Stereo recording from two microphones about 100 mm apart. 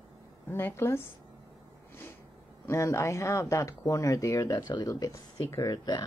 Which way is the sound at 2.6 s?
30° left (ahead or behind).